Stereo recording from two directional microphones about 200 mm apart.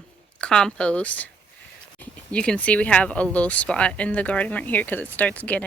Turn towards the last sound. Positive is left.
turn(degrees=5)  # may be behind; listen again after turning